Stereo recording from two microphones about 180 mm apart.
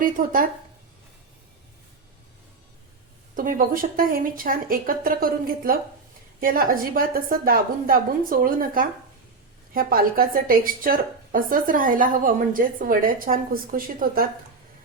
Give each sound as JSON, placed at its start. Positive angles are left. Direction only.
{"t": 0.0, "sound": "a woman's voice", "side_deg": -50}
{"t": 3.3, "sound": "a woman's voice", "side_deg": -50}